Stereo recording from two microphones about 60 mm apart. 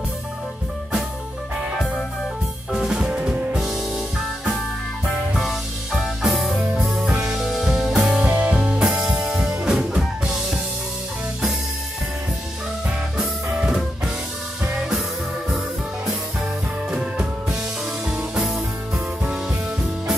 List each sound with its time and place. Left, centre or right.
2.7 s drum kit: centre
3.5 s music: centre
5.4 s music: centre
7.3 s music: centre
8.5 s music: centre
13.2 s music: centre
16.9 s music: centre